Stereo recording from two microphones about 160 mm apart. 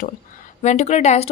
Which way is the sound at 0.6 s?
45° left (ahead or behind).